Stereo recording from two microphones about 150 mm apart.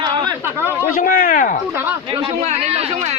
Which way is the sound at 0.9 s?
65° left (ahead or behind).